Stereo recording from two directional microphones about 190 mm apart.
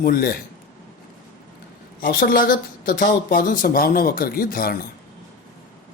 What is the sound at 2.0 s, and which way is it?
Speech, 50° left (ahead or behind).